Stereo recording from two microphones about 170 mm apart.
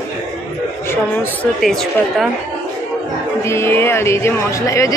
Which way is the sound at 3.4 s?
15° left (ahead or behind).